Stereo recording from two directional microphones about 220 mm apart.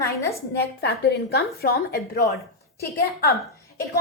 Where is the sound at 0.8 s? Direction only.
45° left (ahead or behind).